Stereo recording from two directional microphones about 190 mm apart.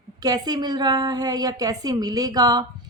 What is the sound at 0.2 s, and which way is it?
A woman's voice, 20° right (ahead or behind).